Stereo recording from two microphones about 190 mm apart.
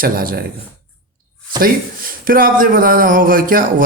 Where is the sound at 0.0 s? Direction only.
50° right (ahead or behind).